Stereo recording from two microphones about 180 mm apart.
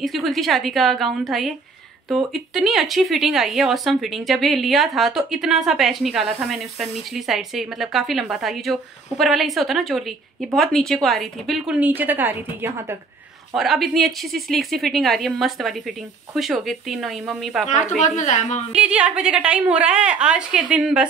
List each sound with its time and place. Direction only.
0.0 s a woman's voice: centre (ahead or behind)
13.6 s a woman's voice: centre (ahead or behind)
17.6 s a woman's voice: 40° left (ahead or behind)
18.8 s a woman's voice: 5° right (ahead or behind)